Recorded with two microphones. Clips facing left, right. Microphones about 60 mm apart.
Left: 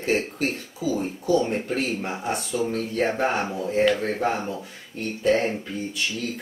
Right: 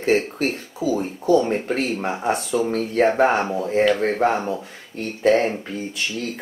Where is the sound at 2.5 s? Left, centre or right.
Right.